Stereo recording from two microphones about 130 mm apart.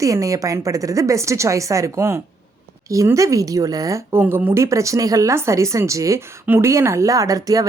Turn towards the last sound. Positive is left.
turn(degrees=-30)  # may be behind; listen again after turning